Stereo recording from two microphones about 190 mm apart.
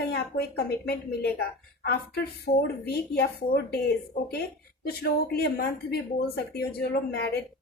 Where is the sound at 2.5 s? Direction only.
40° left (ahead or behind).